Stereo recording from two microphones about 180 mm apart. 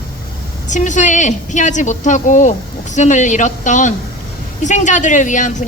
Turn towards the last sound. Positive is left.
turn(degrees=45)  # may be behind; listen again after turning